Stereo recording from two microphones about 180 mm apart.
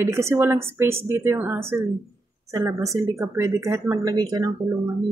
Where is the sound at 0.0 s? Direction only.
15° right (ahead or behind).